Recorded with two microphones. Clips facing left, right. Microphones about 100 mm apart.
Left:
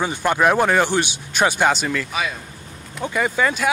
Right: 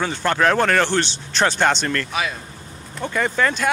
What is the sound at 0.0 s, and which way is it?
Speech, 15° left (ahead or behind).